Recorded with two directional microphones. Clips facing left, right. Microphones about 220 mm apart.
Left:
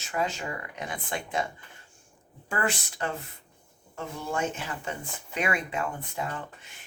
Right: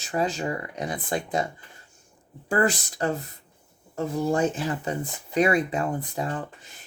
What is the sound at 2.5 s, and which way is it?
Speech, 35° right (ahead or behind).